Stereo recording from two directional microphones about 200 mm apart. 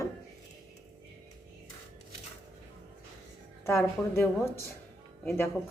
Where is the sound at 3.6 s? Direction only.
15° left (ahead or behind).